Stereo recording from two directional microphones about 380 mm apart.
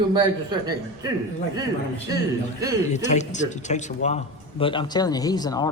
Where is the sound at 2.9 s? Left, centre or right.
Centre.